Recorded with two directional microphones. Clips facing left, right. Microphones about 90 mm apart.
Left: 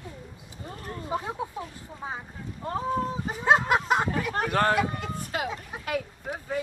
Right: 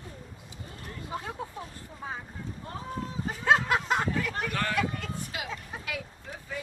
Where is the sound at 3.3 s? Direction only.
20° left (ahead or behind).